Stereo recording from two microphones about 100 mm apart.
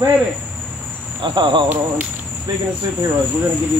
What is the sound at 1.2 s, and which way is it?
Cricket, 50° right (ahead or behind).